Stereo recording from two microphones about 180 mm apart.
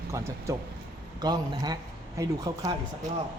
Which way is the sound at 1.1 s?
20° right (ahead or behind).